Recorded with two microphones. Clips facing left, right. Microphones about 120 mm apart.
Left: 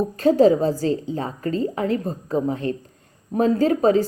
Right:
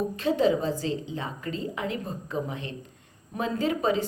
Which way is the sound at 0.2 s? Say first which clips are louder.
Left 9 dB; 40° left (ahead or behind).